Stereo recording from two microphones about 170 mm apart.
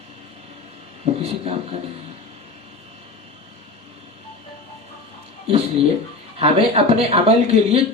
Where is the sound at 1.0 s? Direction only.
35° right (ahead or behind).